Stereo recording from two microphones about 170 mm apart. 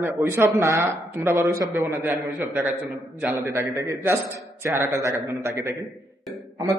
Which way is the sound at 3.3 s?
20° right (ahead or behind).